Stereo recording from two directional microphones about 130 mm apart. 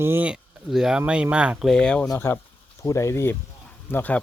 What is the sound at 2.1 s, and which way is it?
Speech, 20° left (ahead or behind).